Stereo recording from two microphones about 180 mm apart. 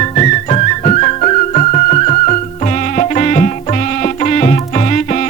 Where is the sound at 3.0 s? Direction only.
45° left (ahead or behind).